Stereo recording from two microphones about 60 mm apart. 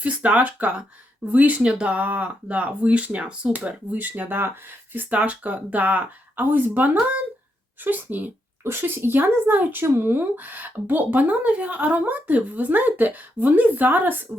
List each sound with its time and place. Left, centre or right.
0.0 s speech: right
8.6 s speech: right